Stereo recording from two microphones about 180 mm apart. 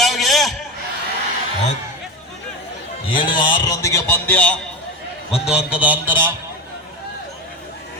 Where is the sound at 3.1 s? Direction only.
25° left (ahead or behind); by 4.6 s 10° left (ahead or behind).